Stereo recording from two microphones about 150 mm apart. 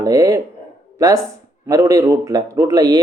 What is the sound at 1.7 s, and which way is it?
Speech, 25° right (ahead or behind).